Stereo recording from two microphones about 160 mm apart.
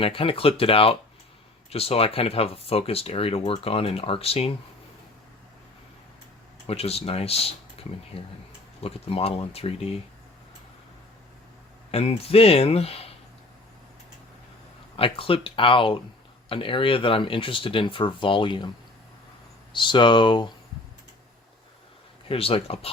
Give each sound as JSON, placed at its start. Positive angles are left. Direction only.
{"t": 0.0, "sound": "speech", "side_deg": 35}
{"t": 6.7, "sound": "speech", "side_deg": 40}
{"t": 11.9, "sound": "speech", "side_deg": 40}
{"t": 14.9, "sound": "speech", "side_deg": 35}
{"t": 19.7, "sound": "speech", "side_deg": 30}
{"t": 22.3, "sound": "speech", "side_deg": 35}